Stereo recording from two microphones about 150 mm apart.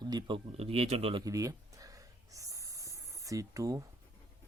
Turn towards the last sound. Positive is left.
turn(degrees=-20)  # may be behind; listen again after turning